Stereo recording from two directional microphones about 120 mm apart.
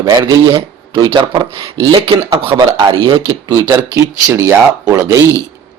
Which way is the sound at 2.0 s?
55° right (ahead or behind).